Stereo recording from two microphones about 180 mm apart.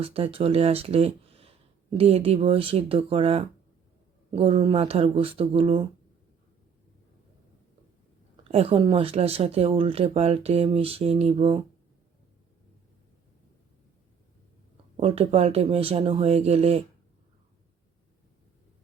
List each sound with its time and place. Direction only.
0.0 s speech: 30° right (ahead or behind)
8.4 s speech: 30° right (ahead or behind)
14.9 s speech: 30° right (ahead or behind)